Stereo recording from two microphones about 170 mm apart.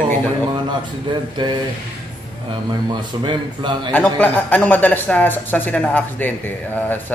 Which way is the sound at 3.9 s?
10° left (ahead or behind).